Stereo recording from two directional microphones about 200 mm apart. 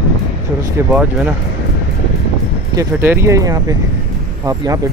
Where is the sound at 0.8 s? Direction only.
10° right (ahead or behind).